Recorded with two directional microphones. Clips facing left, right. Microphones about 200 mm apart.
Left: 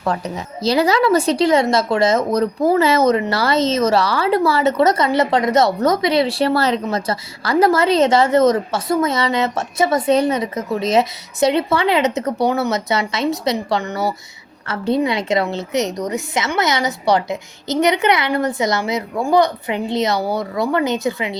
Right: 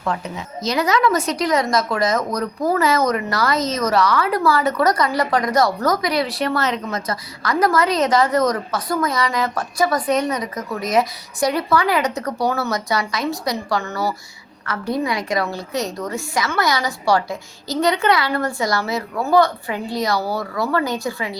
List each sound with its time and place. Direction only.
0.0 s speech: 35° left (ahead or behind); by 21.3 s 20° left (ahead or behind)